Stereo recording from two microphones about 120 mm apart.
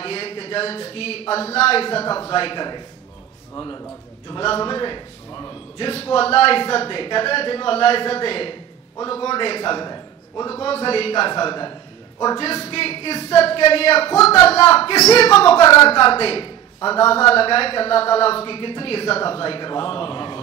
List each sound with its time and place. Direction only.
0.0 s a man's voice: 50° left (ahead or behind); by 3.8 s 35° left (ahead or behind)
4.4 s a man's voice: 45° left (ahead or behind)
10.6 s a man's voice: 50° left (ahead or behind)
11.4 s a man's voice: 40° left (ahead or behind)
12.6 s speech: 50° left (ahead or behind)
15.6 s a woman's voice: 25° left (ahead or behind)
15.9 s a man's voice: 55° left (ahead or behind)